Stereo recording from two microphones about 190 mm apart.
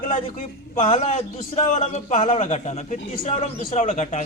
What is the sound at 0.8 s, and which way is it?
Speech, 35° left (ahead or behind).